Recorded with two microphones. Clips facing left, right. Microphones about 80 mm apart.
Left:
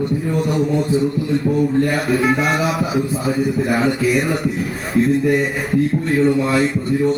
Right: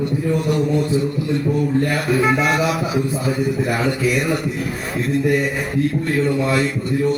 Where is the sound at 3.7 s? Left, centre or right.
Left.